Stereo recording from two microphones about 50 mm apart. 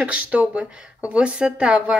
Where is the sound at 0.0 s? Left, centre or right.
Right.